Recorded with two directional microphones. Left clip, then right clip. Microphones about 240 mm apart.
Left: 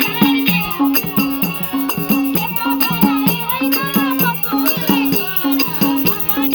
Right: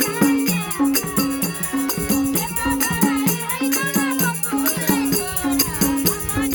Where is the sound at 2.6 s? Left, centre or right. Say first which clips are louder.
Left 4 dB; right.